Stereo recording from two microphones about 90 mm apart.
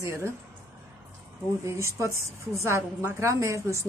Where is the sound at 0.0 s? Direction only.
30° right (ahead or behind).